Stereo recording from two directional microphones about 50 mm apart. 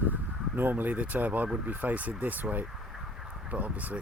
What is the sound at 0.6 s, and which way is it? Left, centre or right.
Speech, right.